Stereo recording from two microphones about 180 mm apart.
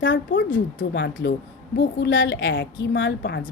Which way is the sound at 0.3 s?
90° left.